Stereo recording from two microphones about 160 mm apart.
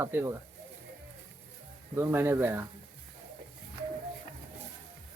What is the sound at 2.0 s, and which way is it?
Speech, 15° right (ahead or behind).